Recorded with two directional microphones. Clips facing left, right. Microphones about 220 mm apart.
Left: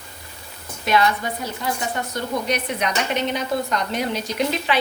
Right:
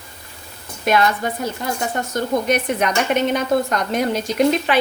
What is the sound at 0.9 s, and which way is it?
A woman's voice, 50° right (ahead or behind).